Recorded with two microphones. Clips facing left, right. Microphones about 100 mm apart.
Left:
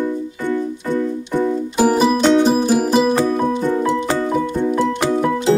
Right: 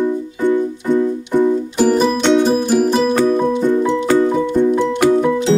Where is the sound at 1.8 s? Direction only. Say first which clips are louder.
Left 1 dB; 10° left (ahead or behind).